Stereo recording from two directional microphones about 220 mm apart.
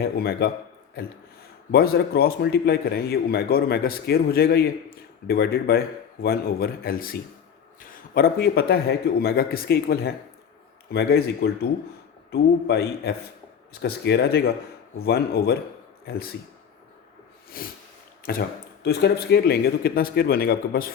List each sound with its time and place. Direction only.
0.0 s a man's voice: 45° left (ahead or behind)
17.5 s a sound: 40° left (ahead or behind)
18.3 s a man's voice: 45° left (ahead or behind)